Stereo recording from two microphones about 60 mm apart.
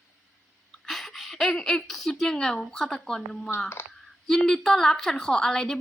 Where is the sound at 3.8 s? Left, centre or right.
Left.